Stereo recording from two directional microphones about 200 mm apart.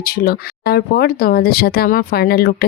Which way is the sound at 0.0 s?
50° left (ahead or behind).